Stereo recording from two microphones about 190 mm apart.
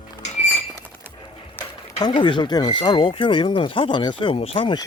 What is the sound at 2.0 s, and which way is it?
Speech, 25° left (ahead or behind).